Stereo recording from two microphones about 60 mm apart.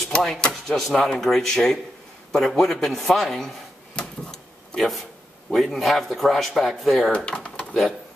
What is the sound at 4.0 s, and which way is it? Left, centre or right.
Drawer open or close, centre.